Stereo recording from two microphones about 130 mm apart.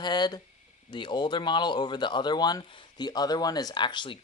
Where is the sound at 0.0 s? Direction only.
35° left (ahead or behind).